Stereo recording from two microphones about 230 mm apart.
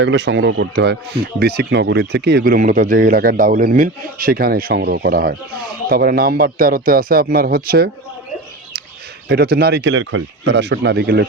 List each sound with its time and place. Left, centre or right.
0.0 s speech: right
9.3 s speech: right